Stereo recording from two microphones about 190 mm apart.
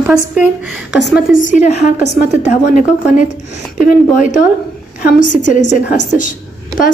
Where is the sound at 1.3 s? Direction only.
40° left (ahead or behind).